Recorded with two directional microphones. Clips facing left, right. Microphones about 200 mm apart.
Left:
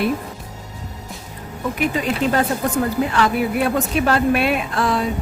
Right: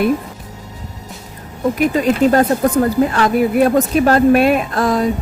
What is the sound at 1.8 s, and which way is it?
Speech, 45° right (ahead or behind).